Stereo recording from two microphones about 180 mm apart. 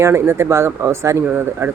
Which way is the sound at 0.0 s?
15° right (ahead or behind).